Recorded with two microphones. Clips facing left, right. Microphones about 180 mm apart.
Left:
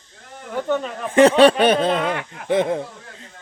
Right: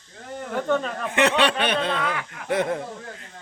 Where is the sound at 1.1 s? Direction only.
35° left (ahead or behind).